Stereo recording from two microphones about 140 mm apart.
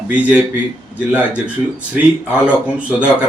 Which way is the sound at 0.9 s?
10° right (ahead or behind).